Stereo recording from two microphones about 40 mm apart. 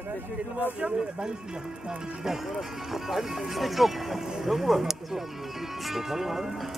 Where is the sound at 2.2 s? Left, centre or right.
Centre.